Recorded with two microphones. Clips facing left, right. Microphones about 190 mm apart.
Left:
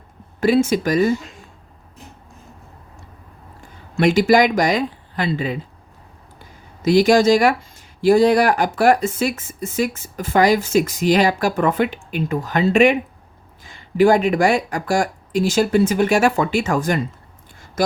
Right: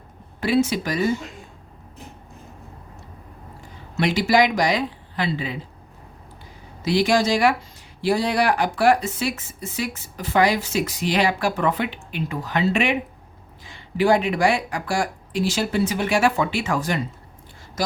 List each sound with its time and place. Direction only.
0.3 s speech: 45° left (ahead or behind)
4.0 s speech: 45° left (ahead or behind)
6.8 s a man's voice: 45° left (ahead or behind)